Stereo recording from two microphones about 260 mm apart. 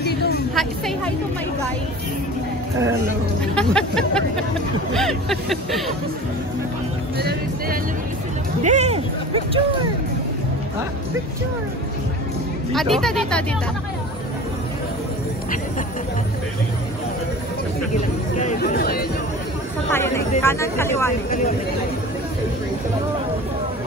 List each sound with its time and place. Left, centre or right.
0.6 s speech: centre
3.5 s speech: centre
7.2 s speech: right
8.6 s speech: right
12.7 s speech: centre
18.4 s speech: left
19.9 s speech: centre